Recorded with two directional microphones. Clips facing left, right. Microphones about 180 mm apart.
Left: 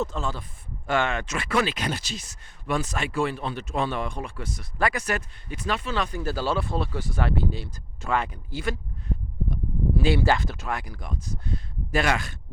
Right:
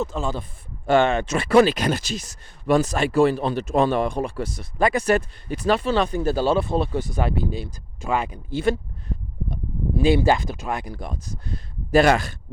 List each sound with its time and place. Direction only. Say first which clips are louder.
0.0 s speech: right 3 dB; 5° right (ahead or behind)
0.9 s speech: right 7 dB; 25° right (ahead or behind)
4.6 s speech: right 6 dB; 25° right (ahead or behind)
8.4 s speech: right 8 dB; 25° right (ahead or behind)
10.0 s speech: right 5 dB; 15° right (ahead or behind); by 12.4 s 35° right (ahead or behind)